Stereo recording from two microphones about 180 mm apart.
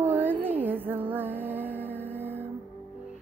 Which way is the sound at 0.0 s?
10° right (ahead or behind).